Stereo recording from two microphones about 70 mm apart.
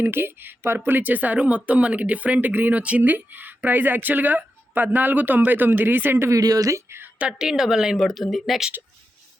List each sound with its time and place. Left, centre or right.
0.0 s speech: right
6.3 s speech: right
7.2 s speech: centre